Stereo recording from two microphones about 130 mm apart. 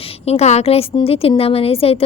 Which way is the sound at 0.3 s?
55° left (ahead or behind).